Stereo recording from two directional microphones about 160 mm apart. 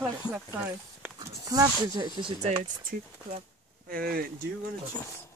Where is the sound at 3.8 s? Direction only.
70° right (ahead or behind).